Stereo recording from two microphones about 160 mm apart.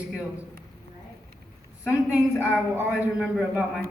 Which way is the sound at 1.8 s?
10° right (ahead or behind).